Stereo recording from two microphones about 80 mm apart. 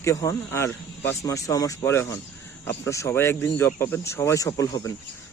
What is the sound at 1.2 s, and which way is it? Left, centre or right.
Speech, left.